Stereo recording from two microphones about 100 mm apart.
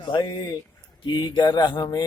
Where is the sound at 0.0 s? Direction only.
50° left (ahead or behind).